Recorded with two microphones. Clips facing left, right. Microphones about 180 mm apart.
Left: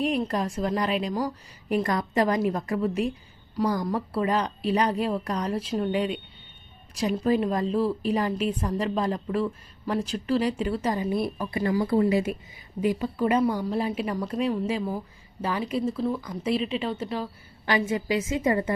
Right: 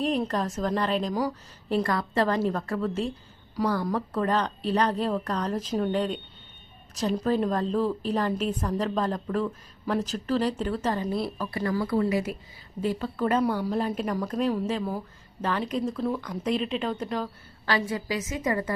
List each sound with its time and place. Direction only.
0.3 s a woman's voice: 10° left (ahead or behind)
12.8 s a woman's voice: 15° left (ahead or behind)
17.7 s a woman's voice: 20° left (ahead or behind)